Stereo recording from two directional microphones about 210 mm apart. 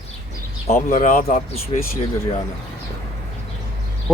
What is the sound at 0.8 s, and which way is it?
Speech, 40° left (ahead or behind).